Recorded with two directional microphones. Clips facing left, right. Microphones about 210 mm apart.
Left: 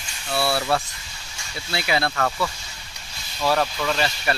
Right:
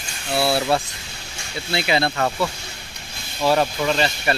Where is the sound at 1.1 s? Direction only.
60° right (ahead or behind).